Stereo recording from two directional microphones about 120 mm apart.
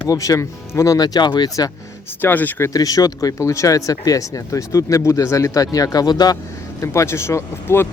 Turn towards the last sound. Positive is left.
turn(degrees=20)  # may be behind; listen again after turning